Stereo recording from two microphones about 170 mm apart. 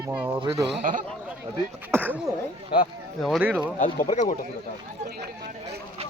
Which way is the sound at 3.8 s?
50° left (ahead or behind).